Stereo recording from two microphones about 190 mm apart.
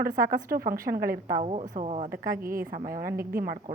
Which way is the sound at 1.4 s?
35° right (ahead or behind).